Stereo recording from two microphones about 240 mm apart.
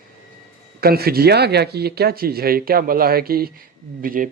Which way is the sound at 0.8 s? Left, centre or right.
Right.